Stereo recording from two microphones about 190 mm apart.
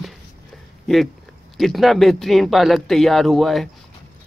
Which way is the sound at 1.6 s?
Centre (ahead or behind).